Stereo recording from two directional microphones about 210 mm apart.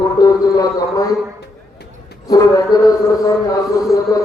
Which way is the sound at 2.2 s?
15° left (ahead or behind).